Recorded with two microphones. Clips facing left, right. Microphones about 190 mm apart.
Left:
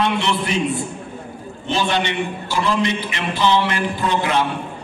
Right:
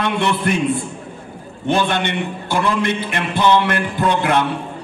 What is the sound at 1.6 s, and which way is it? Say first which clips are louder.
A man's voice: right 2 dB; 55° right (ahead or behind).